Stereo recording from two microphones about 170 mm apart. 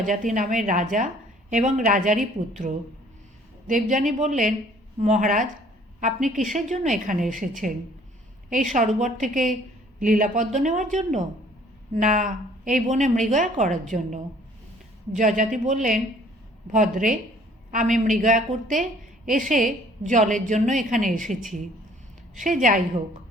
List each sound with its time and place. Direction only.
0.0 s a woman's voice: 50° right (ahead or behind)
2.6 s a woman's voice: 40° right (ahead or behind)